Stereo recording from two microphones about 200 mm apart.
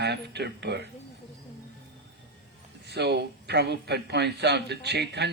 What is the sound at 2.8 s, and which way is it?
A man's voice, 55° right (ahead or behind).